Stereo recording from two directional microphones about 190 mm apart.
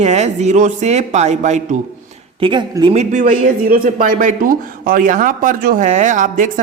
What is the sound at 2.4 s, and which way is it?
Speech, 25° right (ahead or behind).